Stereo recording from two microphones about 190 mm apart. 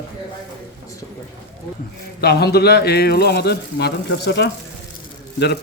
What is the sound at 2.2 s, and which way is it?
A man's voice, 55° left (ahead or behind).